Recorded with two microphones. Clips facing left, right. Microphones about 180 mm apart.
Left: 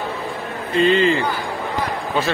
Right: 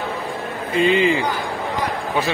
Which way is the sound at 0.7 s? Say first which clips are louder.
Left 1 dB; 15° right (ahead or behind).